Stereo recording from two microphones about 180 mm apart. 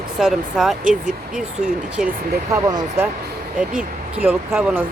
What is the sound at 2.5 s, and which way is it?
Speech, 20° right (ahead or behind).